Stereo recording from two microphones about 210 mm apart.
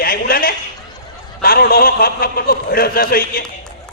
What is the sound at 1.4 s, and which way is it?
A man's voice, 45° left (ahead or behind).